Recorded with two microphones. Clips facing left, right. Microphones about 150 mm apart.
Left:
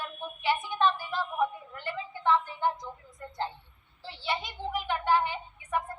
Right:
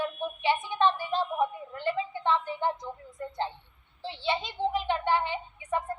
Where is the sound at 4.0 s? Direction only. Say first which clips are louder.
Right 3 dB; 20° right (ahead or behind).